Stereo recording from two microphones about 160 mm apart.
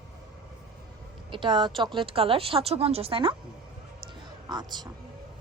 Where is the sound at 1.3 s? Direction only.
30° right (ahead or behind).